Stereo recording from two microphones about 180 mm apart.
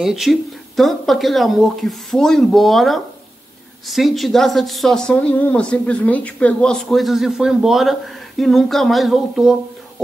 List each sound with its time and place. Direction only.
0.0 s speech: centre (ahead or behind)